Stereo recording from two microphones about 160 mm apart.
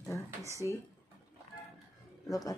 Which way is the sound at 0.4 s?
20° right (ahead or behind).